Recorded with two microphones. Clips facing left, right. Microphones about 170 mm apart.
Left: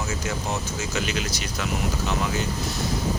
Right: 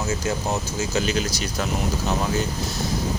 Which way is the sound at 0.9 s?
35° right (ahead or behind).